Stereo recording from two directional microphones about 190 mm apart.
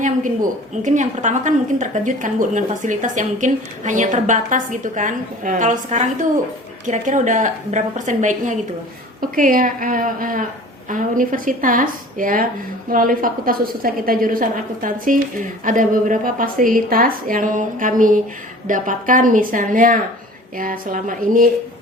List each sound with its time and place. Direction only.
0.8 s a woman's voice: 40° right (ahead or behind)